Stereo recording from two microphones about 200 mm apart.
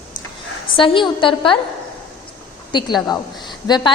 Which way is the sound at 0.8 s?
25° left (ahead or behind).